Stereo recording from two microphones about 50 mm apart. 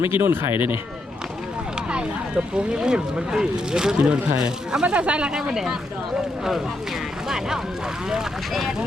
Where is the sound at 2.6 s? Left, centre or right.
Centre.